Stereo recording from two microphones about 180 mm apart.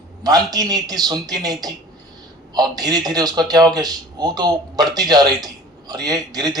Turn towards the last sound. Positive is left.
turn(degrees=-20)  # may be behind; listen again after turning